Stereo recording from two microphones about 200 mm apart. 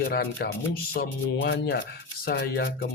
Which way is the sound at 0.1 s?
50° left (ahead or behind).